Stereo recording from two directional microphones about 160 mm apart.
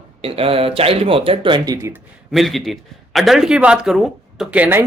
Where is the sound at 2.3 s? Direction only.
Centre (ahead or behind).